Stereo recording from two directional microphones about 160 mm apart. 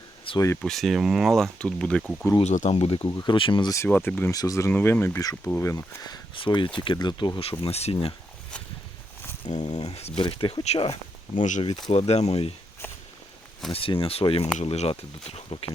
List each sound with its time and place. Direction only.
0.3 s speech: 20° left (ahead or behind)
0.6 s speech: centre (ahead or behind)
2.4 s speech: 45° left (ahead or behind)
2.7 s speech: 35° left (ahead or behind)
3.1 s speech: 20° left (ahead or behind)
3.3 s speech: 30° left (ahead or behind)
3.8 s speech: 10° left (ahead or behind); by 8.1 s 40° left (ahead or behind)
9.6 s speech: 25° left (ahead or behind)
11.3 s speech: 50° left (ahead or behind)
13.7 s speech: 35° left (ahead or behind)